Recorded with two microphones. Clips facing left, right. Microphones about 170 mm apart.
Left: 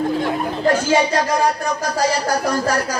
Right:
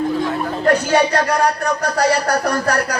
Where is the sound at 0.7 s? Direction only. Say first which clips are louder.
Right 2 dB; 65° right (ahead or behind).